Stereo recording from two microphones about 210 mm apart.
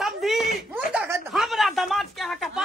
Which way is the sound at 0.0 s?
Centre (ahead or behind).